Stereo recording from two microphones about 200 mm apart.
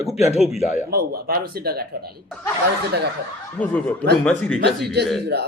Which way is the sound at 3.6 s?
5° left (ahead or behind).